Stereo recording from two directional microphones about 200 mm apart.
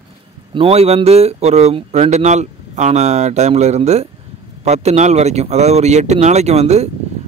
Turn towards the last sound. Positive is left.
turn(degrees=-30)  # may be behind; listen again after turning